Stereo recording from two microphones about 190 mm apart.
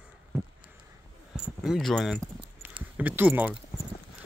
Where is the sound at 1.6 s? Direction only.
Centre (ahead or behind).